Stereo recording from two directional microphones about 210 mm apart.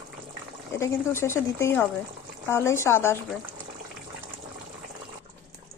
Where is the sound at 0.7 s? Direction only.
15° left (ahead or behind).